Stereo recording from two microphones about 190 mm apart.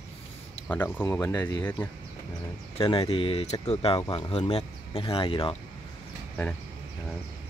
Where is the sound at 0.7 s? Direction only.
10° left (ahead or behind).